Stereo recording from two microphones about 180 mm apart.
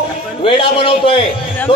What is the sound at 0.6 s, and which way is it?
Speech, 30° left (ahead or behind).